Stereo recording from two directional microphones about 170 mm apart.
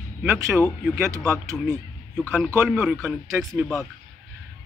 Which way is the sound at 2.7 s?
Centre (ahead or behind).